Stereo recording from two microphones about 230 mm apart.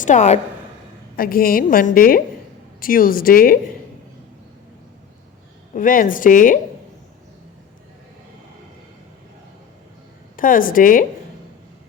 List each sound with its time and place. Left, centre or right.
0.0 s a woman's voice: left
5.7 s a woman's voice: left
10.3 s a woman's voice: left